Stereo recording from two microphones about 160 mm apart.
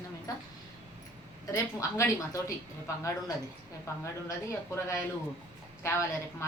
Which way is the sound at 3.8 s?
20° left (ahead or behind).